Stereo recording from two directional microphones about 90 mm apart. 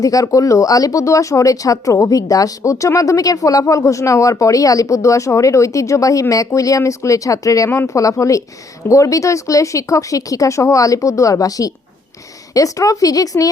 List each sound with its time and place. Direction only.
0.0 s speech: 40° left (ahead or behind)